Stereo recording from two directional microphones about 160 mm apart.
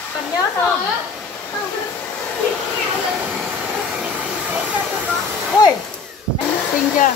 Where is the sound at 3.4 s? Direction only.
10° right (ahead or behind).